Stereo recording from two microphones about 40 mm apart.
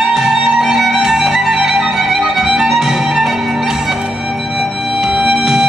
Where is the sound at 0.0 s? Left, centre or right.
Centre.